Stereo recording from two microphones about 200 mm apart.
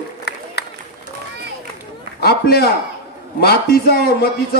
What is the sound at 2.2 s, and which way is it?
A man's voice, 50° left (ahead or behind).